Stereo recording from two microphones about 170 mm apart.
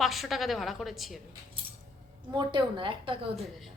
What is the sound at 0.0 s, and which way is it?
A woman's voice, centre (ahead or behind).